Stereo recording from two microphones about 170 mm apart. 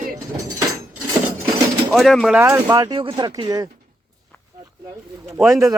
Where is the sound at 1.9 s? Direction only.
Centre (ahead or behind).